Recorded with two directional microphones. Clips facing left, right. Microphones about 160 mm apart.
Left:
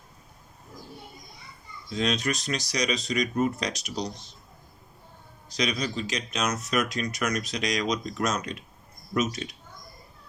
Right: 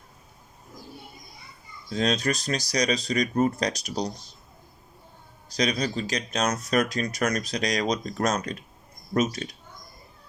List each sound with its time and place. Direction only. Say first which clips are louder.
2.0 s speech: right 2 dB; 35° right (ahead or behind)
5.5 s speech: right 3 dB; 35° right (ahead or behind)